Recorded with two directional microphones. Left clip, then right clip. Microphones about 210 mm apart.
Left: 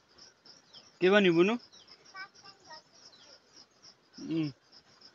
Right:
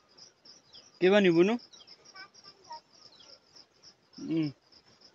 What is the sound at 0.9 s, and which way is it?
Speech, 30° right (ahead or behind).